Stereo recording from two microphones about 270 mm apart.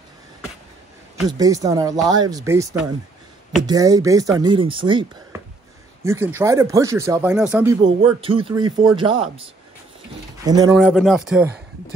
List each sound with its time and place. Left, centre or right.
1.4 s speech: centre
7.8 s speech: centre
10.4 s speech: centre
10.8 s speech: centre